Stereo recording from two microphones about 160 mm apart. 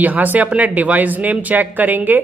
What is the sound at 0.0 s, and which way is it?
Speech, 10° right (ahead or behind).